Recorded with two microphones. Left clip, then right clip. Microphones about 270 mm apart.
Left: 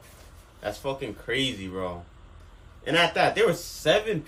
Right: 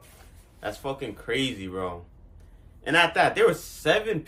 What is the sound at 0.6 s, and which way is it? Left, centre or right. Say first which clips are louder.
Speech: left 1 dB; centre.